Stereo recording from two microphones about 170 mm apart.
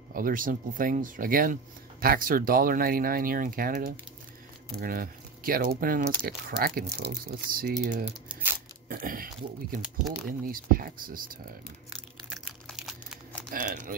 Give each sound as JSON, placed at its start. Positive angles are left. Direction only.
{"t": 0.1, "sound": "speech", "side_deg": -55}
{"t": 7.7, "sound": "speech", "side_deg": -50}
{"t": 12.4, "sound": "crumpling", "side_deg": 0}
{"t": 13.5, "sound": "speech", "side_deg": -50}